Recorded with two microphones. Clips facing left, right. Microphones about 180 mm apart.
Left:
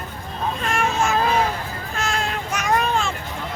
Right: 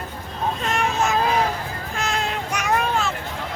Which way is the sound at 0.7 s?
20° right (ahead or behind).